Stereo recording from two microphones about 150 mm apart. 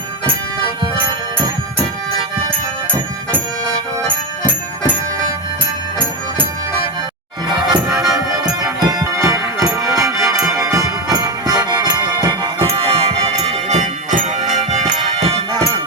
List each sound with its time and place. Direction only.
7.7 s music: 25° right (ahead or behind); by 15.6 s 45° right (ahead or behind)